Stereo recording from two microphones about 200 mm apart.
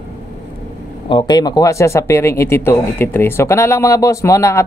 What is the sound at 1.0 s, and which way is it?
Speech, 20° left (ahead or behind).